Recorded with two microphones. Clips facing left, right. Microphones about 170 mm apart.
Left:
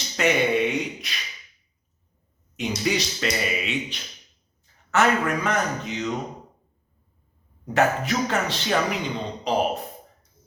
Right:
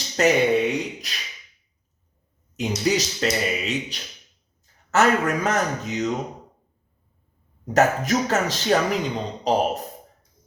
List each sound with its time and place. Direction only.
0.2 s a man's voice: 40° right (ahead or behind)
2.6 s a man's voice: 40° right (ahead or behind)
7.6 s a man's voice: 40° right (ahead or behind)